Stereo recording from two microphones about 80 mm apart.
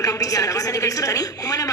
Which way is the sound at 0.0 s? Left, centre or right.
Left.